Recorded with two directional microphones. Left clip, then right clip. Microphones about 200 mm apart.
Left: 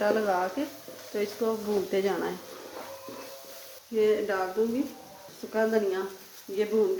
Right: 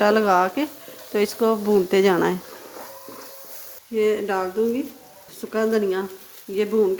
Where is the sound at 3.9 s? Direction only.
40° right (ahead or behind).